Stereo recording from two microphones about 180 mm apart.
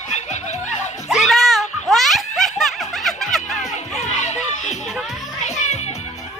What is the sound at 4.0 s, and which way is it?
Children playing, 40° left (ahead or behind).